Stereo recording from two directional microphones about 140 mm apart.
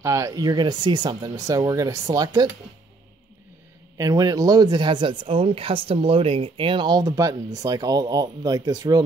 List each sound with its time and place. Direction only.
0.0 s speech: 20° right (ahead or behind)
4.0 s speech: 25° right (ahead or behind)